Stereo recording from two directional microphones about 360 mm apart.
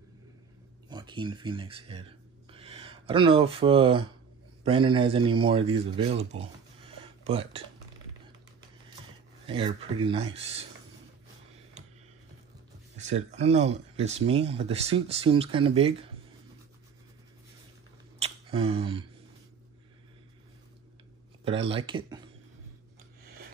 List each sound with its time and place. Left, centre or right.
0.8 s speech: centre
9.5 s speech: centre
12.9 s speech: centre
18.2 s a sound: centre
21.5 s speech: centre